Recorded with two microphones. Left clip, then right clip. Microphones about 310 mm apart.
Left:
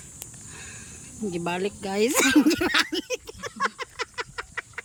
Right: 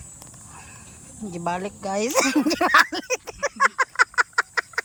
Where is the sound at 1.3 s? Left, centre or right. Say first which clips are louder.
Right 2 dB; centre.